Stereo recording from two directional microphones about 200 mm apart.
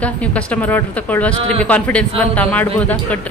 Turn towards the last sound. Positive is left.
turn(degrees=5)  # may be behind; listen again after turning